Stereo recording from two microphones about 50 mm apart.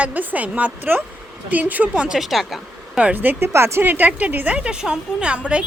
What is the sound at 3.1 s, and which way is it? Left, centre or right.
Speech, right.